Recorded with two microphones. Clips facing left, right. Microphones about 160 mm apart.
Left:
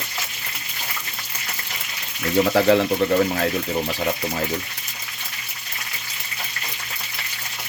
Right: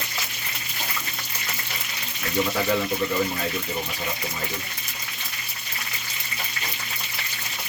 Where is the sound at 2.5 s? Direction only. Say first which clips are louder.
Left 7 dB; 70° left (ahead or behind).